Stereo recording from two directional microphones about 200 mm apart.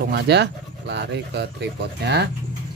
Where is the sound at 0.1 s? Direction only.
55° right (ahead or behind).